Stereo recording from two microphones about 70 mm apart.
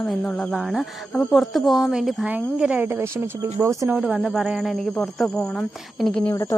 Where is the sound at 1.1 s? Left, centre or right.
Centre.